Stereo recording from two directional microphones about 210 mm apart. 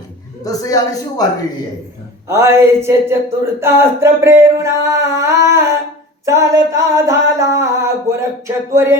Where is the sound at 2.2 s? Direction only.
15° right (ahead or behind).